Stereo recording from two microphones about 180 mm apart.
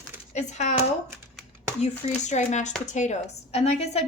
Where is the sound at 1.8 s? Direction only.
40° left (ahead or behind).